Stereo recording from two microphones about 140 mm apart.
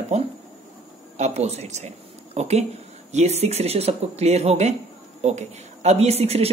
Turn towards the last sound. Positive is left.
turn(degrees=-50)  # may be behind; listen again after turning